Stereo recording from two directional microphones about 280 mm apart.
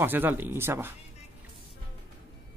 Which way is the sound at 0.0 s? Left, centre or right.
Centre.